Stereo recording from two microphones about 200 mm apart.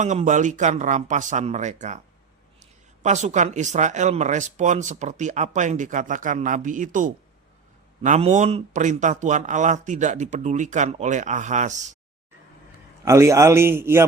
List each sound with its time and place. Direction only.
0.0 s speech: 35° right (ahead or behind)
13.1 s a man's voice: 15° right (ahead or behind)